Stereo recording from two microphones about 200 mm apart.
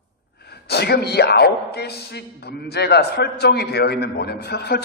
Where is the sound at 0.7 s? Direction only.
55° left (ahead or behind).